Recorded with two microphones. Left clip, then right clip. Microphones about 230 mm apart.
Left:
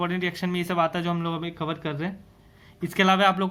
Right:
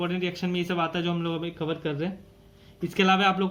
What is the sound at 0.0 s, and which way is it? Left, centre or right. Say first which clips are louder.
A man's voice: left 2 dB; left.